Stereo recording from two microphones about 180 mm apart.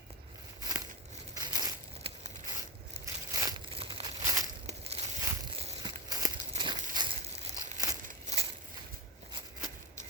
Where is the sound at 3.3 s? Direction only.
20° right (ahead or behind).